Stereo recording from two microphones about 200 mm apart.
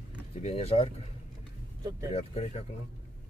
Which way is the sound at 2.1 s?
30° left (ahead or behind).